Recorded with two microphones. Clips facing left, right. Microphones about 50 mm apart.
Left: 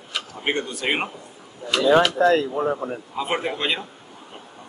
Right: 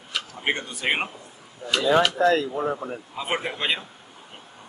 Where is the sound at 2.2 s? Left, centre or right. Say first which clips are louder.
Left 2 dB; left.